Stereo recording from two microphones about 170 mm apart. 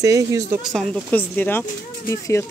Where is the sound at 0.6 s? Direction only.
Centre (ahead or behind); by 2.5 s 15° left (ahead or behind).